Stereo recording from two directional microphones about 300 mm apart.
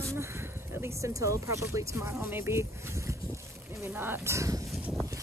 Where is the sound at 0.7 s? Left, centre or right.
Centre.